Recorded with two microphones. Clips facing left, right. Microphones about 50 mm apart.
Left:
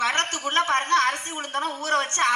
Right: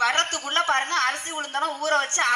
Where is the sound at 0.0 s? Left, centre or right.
Left.